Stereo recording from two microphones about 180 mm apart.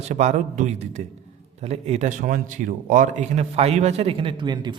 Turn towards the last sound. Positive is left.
turn(degrees=-25)  # may be behind; listen again after turning